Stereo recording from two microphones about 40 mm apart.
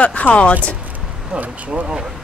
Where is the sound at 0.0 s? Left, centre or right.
Left.